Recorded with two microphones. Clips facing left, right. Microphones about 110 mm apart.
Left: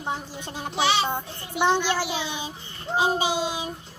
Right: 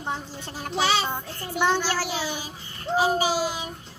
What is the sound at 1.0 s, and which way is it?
A child's voice, 15° left (ahead or behind).